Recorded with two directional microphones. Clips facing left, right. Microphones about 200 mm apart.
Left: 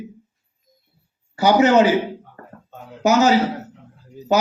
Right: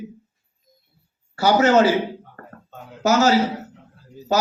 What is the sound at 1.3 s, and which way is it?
Speech, 15° left (ahead or behind).